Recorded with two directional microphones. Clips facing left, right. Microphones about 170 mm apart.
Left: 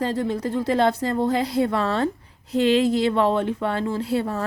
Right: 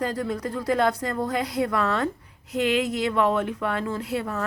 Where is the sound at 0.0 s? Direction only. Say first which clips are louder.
Left 3 dB; 25° left (ahead or behind).